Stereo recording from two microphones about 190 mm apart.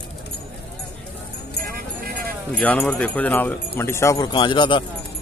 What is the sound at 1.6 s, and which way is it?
Music, 55° right (ahead or behind).